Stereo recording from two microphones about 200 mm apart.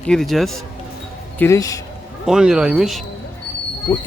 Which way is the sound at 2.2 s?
5° right (ahead or behind).